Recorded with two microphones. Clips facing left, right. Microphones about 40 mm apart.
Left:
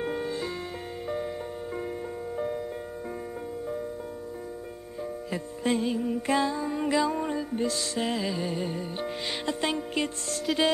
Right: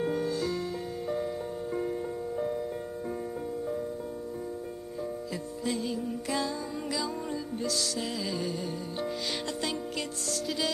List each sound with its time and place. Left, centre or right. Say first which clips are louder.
0.0 s music: right 1 dB; left
5.3 s music: left 8 dB; left